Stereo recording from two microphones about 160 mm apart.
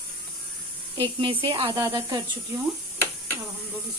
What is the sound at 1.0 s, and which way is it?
Speech, 30° right (ahead or behind).